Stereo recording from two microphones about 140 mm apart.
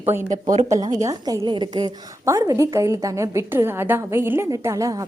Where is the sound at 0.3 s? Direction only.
65° right (ahead or behind).